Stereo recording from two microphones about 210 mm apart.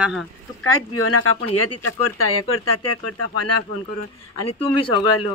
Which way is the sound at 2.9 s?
90° left.